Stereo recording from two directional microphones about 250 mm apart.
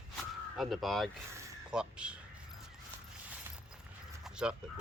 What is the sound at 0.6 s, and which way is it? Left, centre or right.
Speech, centre.